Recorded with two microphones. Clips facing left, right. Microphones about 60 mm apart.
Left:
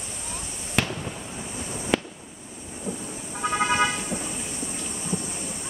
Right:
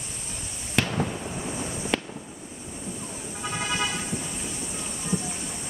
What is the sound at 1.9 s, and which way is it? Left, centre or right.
Fireworks, centre.